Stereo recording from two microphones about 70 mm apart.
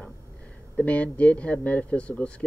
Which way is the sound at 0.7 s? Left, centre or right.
Centre.